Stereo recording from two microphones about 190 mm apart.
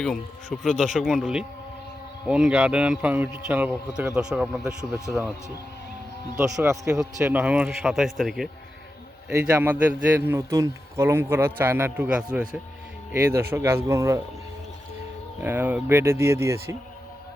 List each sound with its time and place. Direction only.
0.0 s a man's voice: centre (ahead or behind)
4.6 s speech: 15° right (ahead or behind)
5.2 s a man's voice: 5° right (ahead or behind)
6.4 s speech: 15° right (ahead or behind); by 8.4 s centre (ahead or behind)
9.3 s speech: 10° right (ahead or behind)
15.4 s speech: 10° right (ahead or behind)